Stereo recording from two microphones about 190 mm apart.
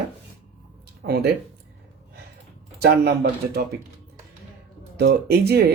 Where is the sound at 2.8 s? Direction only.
60° right (ahead or behind).